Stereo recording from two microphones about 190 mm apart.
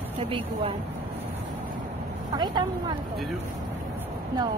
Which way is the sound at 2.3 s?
20° right (ahead or behind).